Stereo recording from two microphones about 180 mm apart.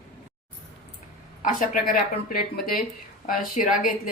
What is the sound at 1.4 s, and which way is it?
A woman's voice, 50° left (ahead or behind).